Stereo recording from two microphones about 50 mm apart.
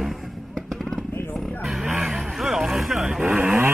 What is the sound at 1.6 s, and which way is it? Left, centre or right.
Vehicle, centre.